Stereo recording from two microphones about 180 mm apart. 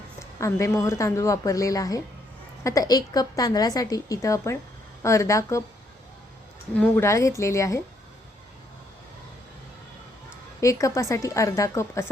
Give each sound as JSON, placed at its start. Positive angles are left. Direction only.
{"t": 0.2, "sound": "a woman's voice", "side_deg": 15}
{"t": 6.7, "sound": "speech", "side_deg": 10}
{"t": 10.6, "sound": "speech", "side_deg": 15}